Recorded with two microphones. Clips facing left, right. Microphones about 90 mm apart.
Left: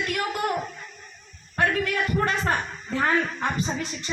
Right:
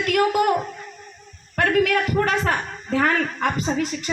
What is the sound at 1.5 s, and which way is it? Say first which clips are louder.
A woman's voice: right 5 dB; 70° right (ahead or behind).